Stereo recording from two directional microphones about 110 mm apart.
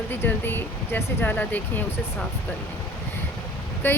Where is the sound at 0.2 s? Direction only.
20° left (ahead or behind).